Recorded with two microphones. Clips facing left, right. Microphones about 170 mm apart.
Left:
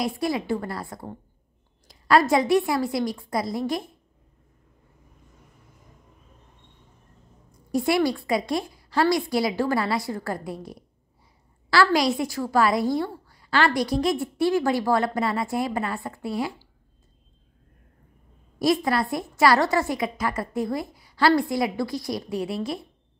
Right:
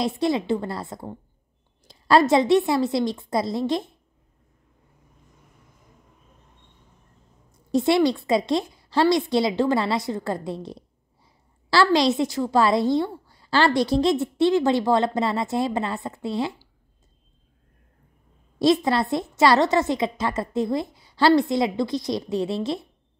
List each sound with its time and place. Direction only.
0.0 s a woman's voice: 25° right (ahead or behind)
7.7 s a woman's voice: 25° right (ahead or behind)
18.6 s a woman's voice: 25° right (ahead or behind)